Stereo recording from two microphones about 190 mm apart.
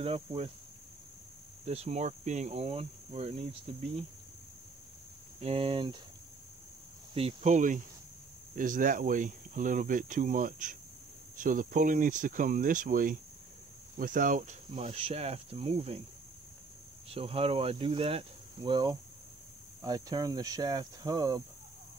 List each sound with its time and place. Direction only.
0.0 s cricket: 30° right (ahead or behind)
1.7 s cricket: 35° right (ahead or behind)
5.4 s speech: 30° right (ahead or behind)
7.2 s cricket: 35° right (ahead or behind)
8.5 s speech: 45° right (ahead or behind)
13.9 s cricket: 45° right (ahead or behind); by 16.0 s 30° right (ahead or behind)
17.1 s speech: 30° right (ahead or behind)